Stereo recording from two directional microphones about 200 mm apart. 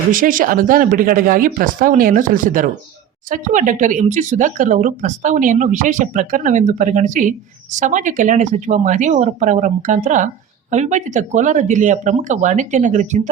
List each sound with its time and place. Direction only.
0.1 s speech: 45° right (ahead or behind)